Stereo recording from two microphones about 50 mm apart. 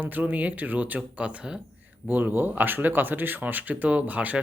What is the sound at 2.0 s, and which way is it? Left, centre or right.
Speech, right.